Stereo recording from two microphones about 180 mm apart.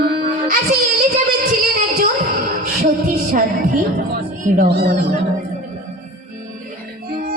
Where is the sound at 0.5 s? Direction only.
50° right (ahead or behind).